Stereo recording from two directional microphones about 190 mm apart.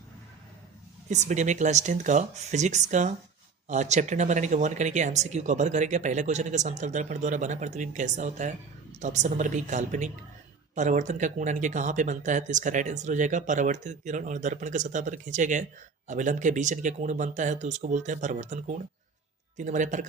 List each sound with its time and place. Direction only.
1.1 s speech: 40° right (ahead or behind)